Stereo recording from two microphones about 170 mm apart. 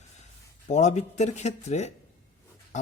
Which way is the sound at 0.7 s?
45° left (ahead or behind).